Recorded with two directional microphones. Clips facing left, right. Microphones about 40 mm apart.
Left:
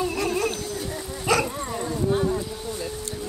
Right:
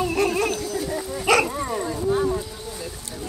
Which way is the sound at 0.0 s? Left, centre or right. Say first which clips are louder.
Right 4 dB; right.